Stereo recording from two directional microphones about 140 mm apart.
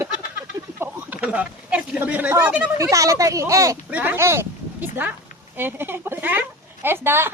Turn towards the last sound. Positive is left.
turn(degrees=-15)  # may be behind; listen again after turning